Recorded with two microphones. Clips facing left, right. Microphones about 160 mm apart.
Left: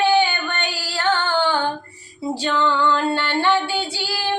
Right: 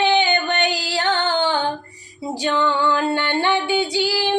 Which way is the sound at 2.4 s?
15° right (ahead or behind).